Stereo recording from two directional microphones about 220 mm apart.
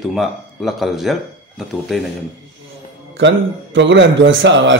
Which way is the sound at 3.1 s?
55° right (ahead or behind).